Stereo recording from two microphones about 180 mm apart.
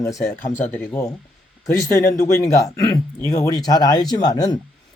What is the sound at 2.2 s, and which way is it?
Speech, 20° left (ahead or behind).